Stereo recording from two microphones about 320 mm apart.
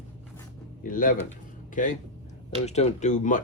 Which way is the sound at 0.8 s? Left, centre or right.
Left.